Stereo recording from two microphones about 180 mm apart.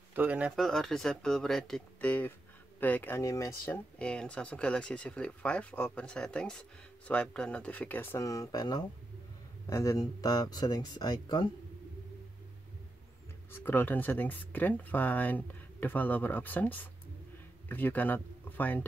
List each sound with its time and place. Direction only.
0.1 s speech: 10° right (ahead or behind); by 11.5 s 25° left (ahead or behind)
13.5 s speech: 10° left (ahead or behind)